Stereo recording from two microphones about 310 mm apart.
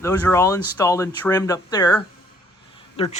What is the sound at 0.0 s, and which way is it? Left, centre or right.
Speech, centre.